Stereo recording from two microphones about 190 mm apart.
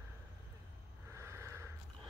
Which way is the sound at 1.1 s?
15° right (ahead or behind).